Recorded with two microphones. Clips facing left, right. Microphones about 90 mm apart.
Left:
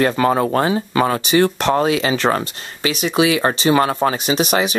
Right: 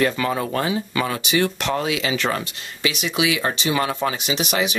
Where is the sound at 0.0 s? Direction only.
40° left (ahead or behind).